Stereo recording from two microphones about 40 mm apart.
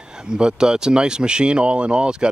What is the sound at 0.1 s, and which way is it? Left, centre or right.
Speech, centre.